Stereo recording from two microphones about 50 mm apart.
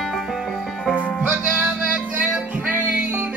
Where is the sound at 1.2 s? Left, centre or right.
Right.